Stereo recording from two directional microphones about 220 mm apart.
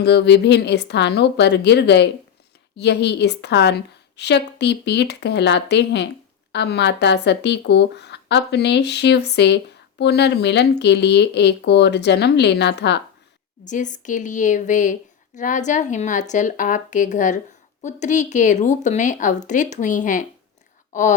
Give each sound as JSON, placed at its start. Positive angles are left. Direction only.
{"t": 0.0, "sound": "speech", "side_deg": 50}
{"t": 13.7, "sound": "speech", "side_deg": 35}